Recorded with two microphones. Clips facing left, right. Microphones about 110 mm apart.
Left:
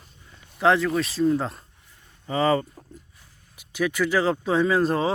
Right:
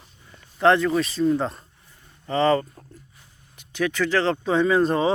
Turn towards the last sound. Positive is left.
turn(degrees=0)  # may be behind; listen again after turning